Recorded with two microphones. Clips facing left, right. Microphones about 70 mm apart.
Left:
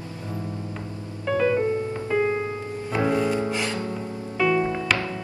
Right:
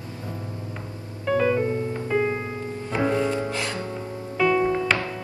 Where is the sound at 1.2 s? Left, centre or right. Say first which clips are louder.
Even; centre.